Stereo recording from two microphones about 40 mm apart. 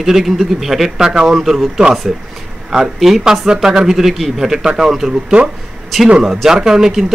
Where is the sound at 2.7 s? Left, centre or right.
Centre.